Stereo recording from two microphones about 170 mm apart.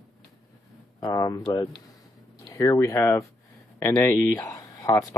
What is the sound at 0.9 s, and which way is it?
Speech, 20° left (ahead or behind).